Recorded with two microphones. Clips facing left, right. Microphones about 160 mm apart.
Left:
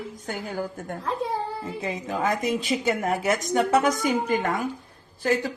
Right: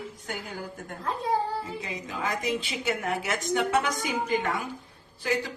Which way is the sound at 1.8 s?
50° left (ahead or behind).